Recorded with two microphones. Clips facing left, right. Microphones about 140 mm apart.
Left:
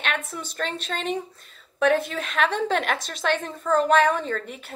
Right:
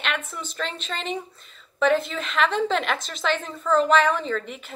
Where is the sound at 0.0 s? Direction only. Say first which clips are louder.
Even; 45° left (ahead or behind).